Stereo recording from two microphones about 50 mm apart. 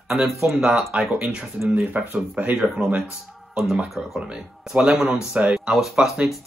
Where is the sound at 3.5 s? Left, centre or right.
Centre.